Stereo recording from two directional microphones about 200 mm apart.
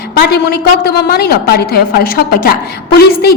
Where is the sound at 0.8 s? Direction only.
55° left (ahead or behind).